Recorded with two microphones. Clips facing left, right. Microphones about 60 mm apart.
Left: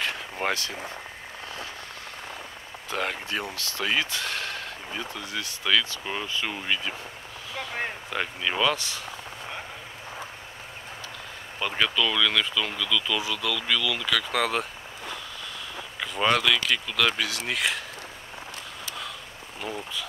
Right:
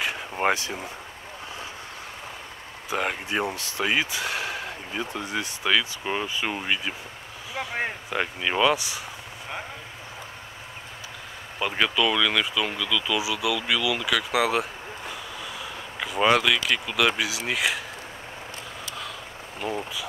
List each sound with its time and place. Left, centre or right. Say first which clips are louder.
0.0 s a sound: right 4 dB; centre
2.9 s speech: right 2 dB; centre
11.6 s speech: right 2 dB; centre
19.6 s speech: right 4 dB; centre